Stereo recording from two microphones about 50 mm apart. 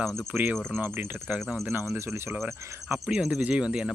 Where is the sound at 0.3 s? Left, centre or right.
Right.